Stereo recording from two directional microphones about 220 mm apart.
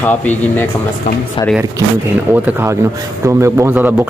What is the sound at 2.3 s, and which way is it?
A man's voice, 10° right (ahead or behind).